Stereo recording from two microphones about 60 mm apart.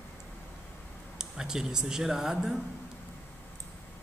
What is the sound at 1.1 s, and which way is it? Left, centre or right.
Speech, centre.